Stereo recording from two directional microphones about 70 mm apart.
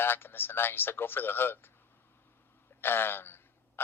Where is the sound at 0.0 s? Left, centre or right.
Left.